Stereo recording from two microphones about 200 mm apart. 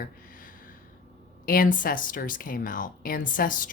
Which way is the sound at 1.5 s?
45° left (ahead or behind).